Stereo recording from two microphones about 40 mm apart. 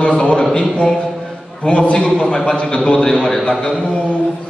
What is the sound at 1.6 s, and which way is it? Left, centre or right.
A man's voice, left.